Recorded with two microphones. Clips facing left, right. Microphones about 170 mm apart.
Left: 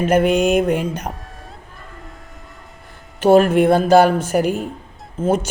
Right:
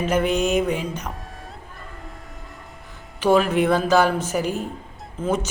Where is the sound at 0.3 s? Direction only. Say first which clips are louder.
Left 5 dB; 60° left (ahead or behind).